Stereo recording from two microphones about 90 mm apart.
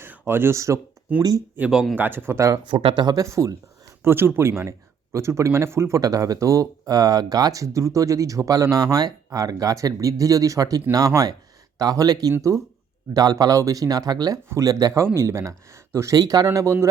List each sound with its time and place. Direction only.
0.0 s speech: 25° right (ahead or behind)
1.7 s a man's voice: 5° right (ahead or behind)
2.0 s speech: 25° right (ahead or behind)
2.6 s speech: 70° right (ahead or behind); by 3.9 s 40° right (ahead or behind)
4.0 s speech: 25° right (ahead or behind)
6.0 s speech: 40° right (ahead or behind)
15.0 s speech: 30° right (ahead or behind)